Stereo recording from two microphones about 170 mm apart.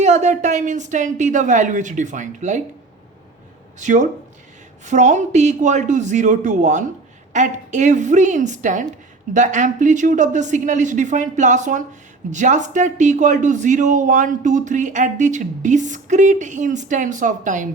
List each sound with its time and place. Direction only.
0.0 s speech: 45° right (ahead or behind)
3.8 s speech: 45° right (ahead or behind)